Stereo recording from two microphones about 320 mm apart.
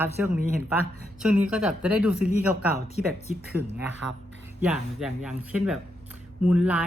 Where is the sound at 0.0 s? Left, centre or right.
Centre.